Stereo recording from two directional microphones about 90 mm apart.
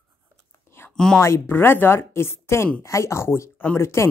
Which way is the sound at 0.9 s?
5° left (ahead or behind).